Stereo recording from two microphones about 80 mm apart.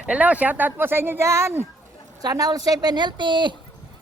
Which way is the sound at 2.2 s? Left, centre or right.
Right.